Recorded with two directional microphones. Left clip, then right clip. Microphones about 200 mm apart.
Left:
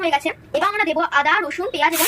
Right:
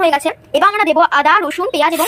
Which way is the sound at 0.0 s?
35° right (ahead or behind).